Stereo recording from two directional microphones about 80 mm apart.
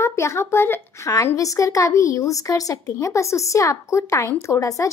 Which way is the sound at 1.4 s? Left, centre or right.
Left.